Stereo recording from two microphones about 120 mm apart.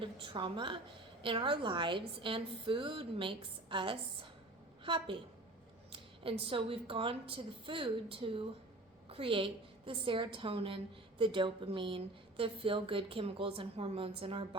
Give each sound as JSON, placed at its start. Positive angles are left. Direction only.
{"t": 0.0, "sound": "a woman's voice", "side_deg": -45}